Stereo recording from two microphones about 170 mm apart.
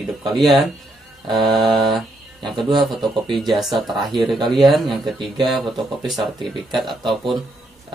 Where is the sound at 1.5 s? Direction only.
25° right (ahead or behind).